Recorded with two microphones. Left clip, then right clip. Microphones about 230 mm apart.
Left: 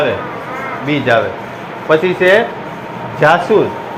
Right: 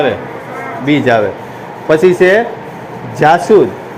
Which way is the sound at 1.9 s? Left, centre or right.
Right.